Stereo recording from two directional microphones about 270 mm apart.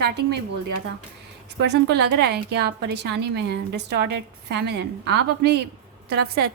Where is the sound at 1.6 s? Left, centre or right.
Right.